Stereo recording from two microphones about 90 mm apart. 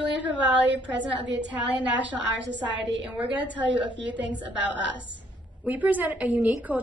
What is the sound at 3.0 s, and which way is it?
A woman's voice, 15° right (ahead or behind).